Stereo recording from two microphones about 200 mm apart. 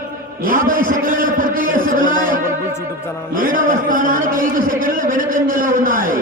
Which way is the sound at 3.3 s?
45° right (ahead or behind).